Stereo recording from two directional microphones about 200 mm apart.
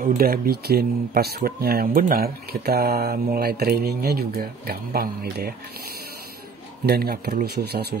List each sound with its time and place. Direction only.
0.0 s speech: 50° right (ahead or behind)
6.9 s speech: 50° right (ahead or behind)